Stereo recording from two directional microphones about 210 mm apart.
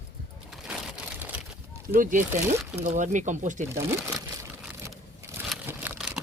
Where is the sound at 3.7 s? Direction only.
10° right (ahead or behind).